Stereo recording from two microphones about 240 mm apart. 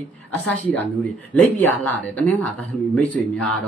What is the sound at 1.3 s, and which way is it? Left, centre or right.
Speech, centre.